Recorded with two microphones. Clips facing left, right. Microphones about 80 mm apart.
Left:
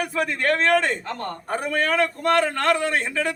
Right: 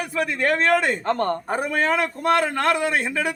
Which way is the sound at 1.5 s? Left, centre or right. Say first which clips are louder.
Left 3 dB; centre.